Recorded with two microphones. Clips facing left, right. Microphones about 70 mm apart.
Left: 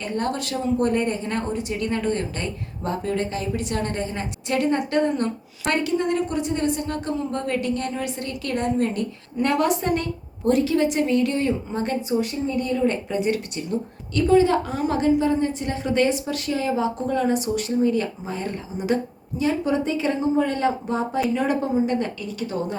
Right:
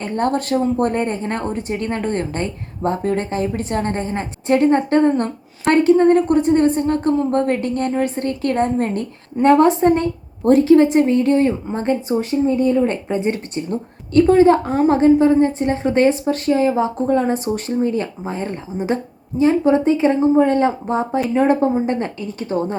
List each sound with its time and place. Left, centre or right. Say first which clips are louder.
0.0 s a woman's voice: right 6 dB; right